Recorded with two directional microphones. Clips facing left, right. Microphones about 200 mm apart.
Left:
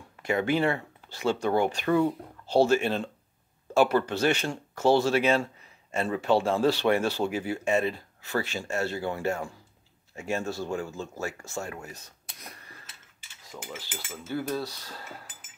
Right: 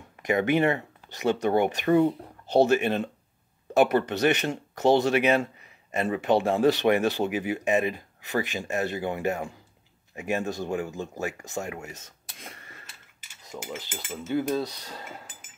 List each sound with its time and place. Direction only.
0.2 s speech: 15° right (ahead or behind)